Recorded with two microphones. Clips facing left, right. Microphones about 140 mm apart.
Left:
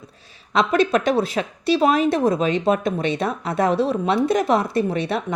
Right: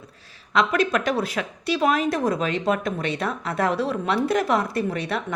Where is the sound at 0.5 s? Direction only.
25° left (ahead or behind).